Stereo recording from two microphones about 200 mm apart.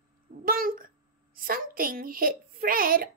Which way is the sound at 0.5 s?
45° right (ahead or behind).